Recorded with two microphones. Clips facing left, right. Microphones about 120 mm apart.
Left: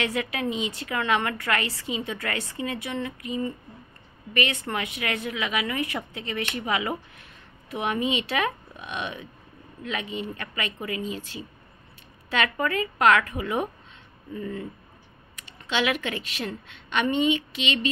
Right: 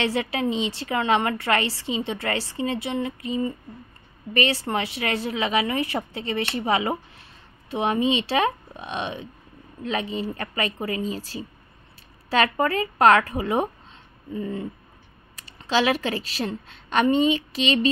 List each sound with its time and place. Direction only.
0.0 s a woman's voice: 30° right (ahead or behind)
15.3 s a woman's voice: 35° right (ahead or behind)